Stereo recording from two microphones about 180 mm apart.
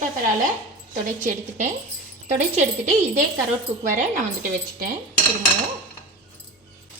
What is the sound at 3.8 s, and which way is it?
Speech, 45° right (ahead or behind).